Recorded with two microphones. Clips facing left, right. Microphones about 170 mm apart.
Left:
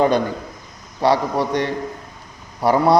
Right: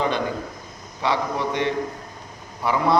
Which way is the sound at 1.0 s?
40° left (ahead or behind).